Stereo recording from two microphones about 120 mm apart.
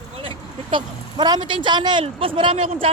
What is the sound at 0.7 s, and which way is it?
Speech, 35° right (ahead or behind).